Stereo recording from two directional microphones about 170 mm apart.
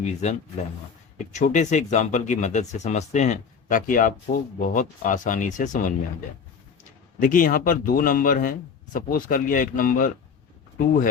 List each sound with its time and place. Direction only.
0.0 s speech: 40° left (ahead or behind)
7.2 s speech: 50° left (ahead or behind)